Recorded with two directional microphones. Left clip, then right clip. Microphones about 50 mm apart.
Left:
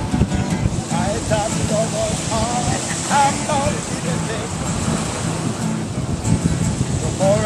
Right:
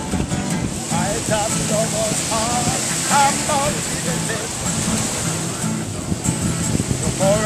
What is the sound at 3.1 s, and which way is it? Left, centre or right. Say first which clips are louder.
Music: even; centre.